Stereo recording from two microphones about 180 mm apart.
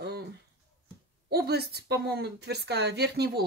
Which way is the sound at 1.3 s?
60° right (ahead or behind).